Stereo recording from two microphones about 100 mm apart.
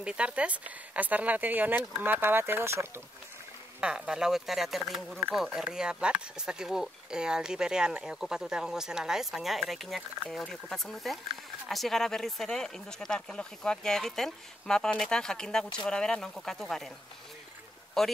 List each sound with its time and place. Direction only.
0.0 s speech: 10° right (ahead or behind)
3.8 s speech: 10° right (ahead or behind)
18.0 s speech: 5° left (ahead or behind)